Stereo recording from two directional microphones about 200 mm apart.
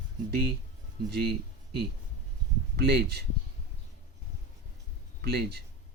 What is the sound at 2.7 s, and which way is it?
Speech, 55° right (ahead or behind).